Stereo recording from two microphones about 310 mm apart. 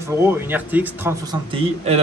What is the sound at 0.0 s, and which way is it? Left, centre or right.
Speech, centre.